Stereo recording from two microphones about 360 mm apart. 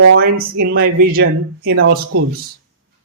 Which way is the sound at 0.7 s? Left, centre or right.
Right.